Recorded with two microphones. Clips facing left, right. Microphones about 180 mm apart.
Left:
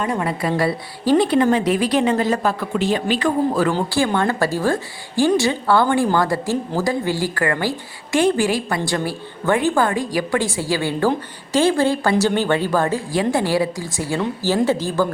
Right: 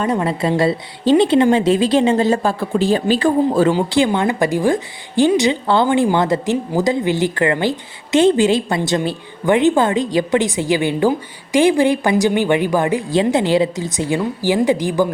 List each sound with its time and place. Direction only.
0.0 s speech: 25° right (ahead or behind)
3.7 s speech: 20° right (ahead or behind)